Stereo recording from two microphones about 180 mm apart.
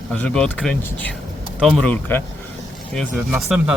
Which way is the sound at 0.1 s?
5° left (ahead or behind).